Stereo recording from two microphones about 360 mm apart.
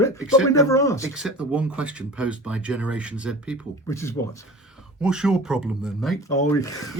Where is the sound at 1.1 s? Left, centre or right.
Centre.